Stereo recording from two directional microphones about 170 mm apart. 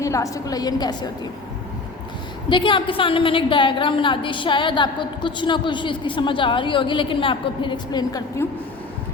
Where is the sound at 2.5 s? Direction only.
30° left (ahead or behind).